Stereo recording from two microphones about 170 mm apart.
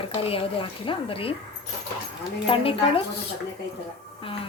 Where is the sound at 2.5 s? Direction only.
35° left (ahead or behind).